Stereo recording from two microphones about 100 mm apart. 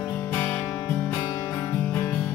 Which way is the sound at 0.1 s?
20° left (ahead or behind).